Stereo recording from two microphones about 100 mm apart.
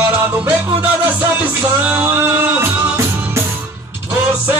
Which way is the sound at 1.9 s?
20° right (ahead or behind).